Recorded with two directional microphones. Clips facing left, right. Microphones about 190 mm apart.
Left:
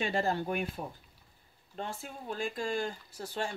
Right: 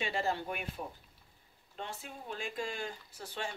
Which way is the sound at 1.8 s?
45° left (ahead or behind).